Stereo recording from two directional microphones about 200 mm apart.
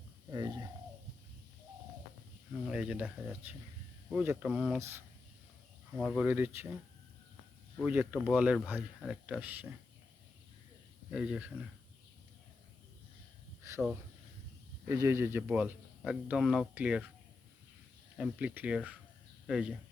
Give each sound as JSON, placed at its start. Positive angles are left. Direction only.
{"t": 0.3, "sound": "bird", "side_deg": -20}
{"t": 2.6, "sound": "speech", "side_deg": -5}
{"t": 7.9, "sound": "speech", "side_deg": -10}
{"t": 11.1, "sound": "speech", "side_deg": -5}
{"t": 13.6, "sound": "a sound", "side_deg": -15}
{"t": 14.8, "sound": "speech", "side_deg": -15}
{"t": 18.2, "sound": "speech", "side_deg": -5}